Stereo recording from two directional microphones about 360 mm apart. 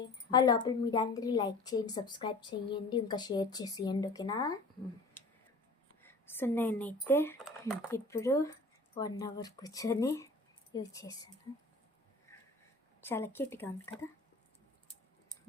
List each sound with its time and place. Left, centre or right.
0.0 s a woman's voice: centre
6.0 s a woman's voice: centre
13.0 s a woman's voice: centre